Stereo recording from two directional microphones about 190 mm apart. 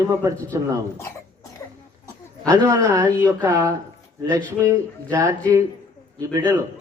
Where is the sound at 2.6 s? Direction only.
15° right (ahead or behind).